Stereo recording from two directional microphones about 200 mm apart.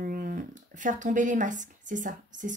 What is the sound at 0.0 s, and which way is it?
Speech, 45° right (ahead or behind).